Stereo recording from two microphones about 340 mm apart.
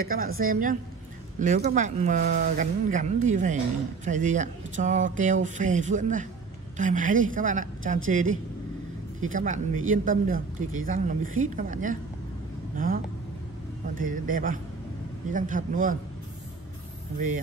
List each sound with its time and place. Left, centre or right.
0.0 s speech: right